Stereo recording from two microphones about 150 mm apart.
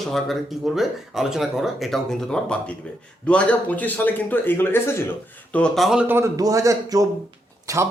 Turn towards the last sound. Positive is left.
turn(degrees=-20)  # may be behind; listen again after turning